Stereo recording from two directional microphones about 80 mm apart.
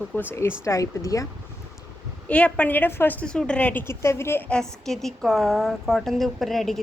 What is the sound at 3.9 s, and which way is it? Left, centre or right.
Speech, left.